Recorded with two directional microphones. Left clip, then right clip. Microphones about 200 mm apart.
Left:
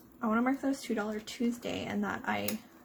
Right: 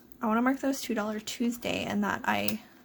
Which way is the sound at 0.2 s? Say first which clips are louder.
Right 3 dB; 25° right (ahead or behind).